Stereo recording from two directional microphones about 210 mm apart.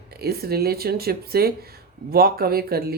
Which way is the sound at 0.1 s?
50° right (ahead or behind).